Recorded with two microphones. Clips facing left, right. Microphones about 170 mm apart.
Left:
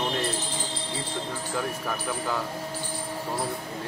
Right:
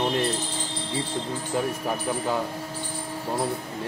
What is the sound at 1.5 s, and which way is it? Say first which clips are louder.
Speech: right 4 dB; 25° right (ahead or behind).